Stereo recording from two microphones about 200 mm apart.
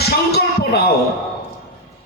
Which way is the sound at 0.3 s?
55° left (ahead or behind).